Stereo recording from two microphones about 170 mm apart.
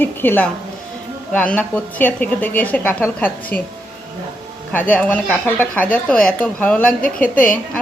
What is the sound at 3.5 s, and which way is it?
Speech, 60° left (ahead or behind).